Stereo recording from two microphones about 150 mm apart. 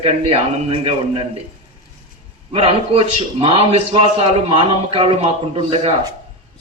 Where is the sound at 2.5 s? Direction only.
40° right (ahead or behind).